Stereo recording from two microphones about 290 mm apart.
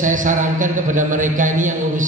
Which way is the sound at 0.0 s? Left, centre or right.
Right.